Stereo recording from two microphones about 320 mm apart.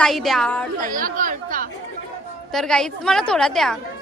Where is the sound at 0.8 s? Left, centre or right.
Right.